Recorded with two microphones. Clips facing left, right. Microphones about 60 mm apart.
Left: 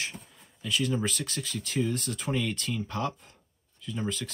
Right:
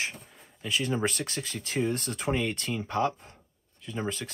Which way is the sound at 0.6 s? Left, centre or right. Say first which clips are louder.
Even; right.